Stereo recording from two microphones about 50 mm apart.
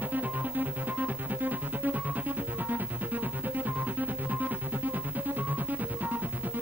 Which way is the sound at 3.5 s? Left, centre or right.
Right.